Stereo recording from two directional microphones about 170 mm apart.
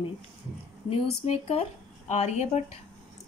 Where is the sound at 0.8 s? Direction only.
35° left (ahead or behind).